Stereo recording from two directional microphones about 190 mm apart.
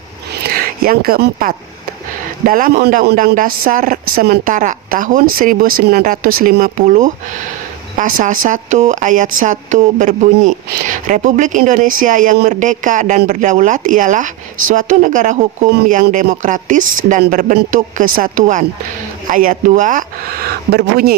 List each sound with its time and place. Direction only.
0.3 s speech: 50° right (ahead or behind)